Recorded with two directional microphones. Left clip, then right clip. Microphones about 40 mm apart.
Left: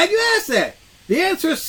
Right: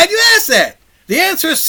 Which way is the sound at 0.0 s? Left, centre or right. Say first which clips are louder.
Right 7 dB; right.